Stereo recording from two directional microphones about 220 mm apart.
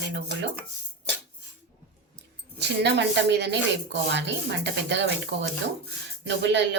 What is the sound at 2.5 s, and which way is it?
A woman's voice, 50° right (ahead or behind).